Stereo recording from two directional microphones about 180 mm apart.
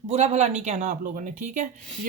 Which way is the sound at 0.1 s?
35° right (ahead or behind).